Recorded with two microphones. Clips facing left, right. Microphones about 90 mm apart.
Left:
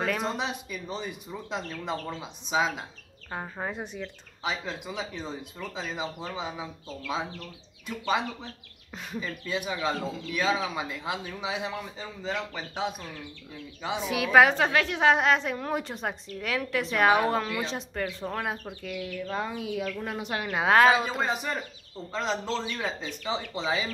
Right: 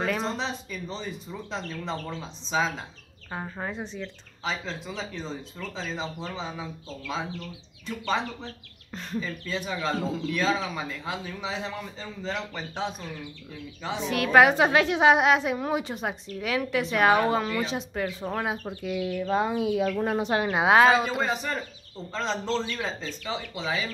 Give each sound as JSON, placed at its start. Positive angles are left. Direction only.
{"t": 0.2, "sound": "a woman's voice", "side_deg": 10}
{"t": 14.5, "sound": "a woman's voice", "side_deg": -15}
{"t": 18.8, "sound": "speech", "side_deg": -20}
{"t": 20.6, "sound": "a woman's voice", "side_deg": -10}